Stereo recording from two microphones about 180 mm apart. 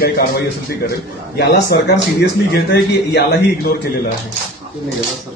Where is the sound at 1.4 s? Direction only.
70° left (ahead or behind).